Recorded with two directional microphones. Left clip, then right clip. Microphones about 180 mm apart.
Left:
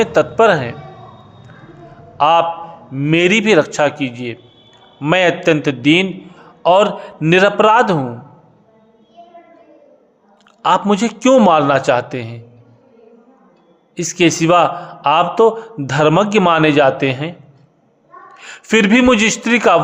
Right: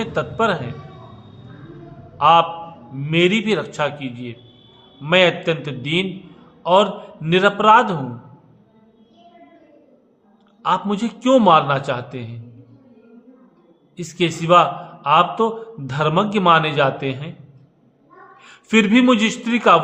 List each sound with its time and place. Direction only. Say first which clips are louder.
0.0 s a man's voice: left 9 dB; 40° left (ahead or behind)
2.1 s a man's voice: left 1 dB; 45° left (ahead or behind)
10.6 s a man's voice: left 6 dB; 45° left (ahead or behind)
13.9 s a man's voice: left 8 dB; 40° left (ahead or behind)
18.3 s a man's voice: left 4 dB; 45° left (ahead or behind)